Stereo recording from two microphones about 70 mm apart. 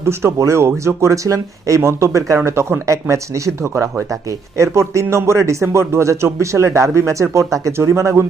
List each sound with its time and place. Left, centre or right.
0.0 s speech: right